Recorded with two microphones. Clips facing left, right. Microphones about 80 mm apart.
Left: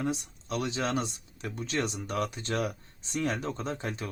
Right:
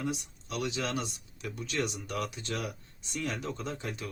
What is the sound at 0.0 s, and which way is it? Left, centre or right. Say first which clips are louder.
Speech: left 3 dB; left.